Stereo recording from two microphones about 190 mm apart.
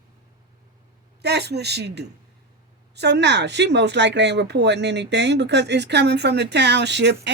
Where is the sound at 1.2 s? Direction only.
60° right (ahead or behind).